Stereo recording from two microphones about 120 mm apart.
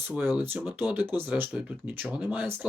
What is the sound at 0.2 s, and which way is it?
Speech, 15° right (ahead or behind).